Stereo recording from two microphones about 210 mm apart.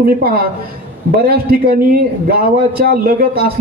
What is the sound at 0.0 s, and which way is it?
A man's voice, 45° right (ahead or behind).